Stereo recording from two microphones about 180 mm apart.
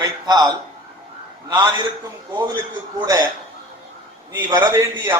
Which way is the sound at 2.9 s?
20° right (ahead or behind).